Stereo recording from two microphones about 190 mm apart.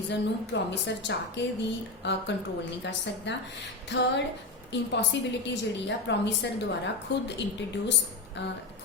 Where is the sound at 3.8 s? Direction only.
65° left (ahead or behind).